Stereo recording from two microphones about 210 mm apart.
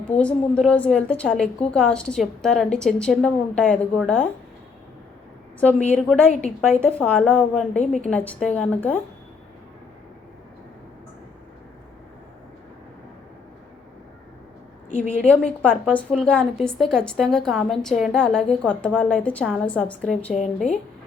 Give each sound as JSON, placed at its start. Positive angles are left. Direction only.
{"t": 0.2, "sound": "a woman's voice", "side_deg": 5}
{"t": 5.5, "sound": "a woman's voice", "side_deg": 10}
{"t": 7.8, "sound": "a woman's voice", "side_deg": 35}
{"t": 8.1, "sound": "a woman's voice", "side_deg": 5}
{"t": 15.1, "sound": "a woman's voice", "side_deg": 5}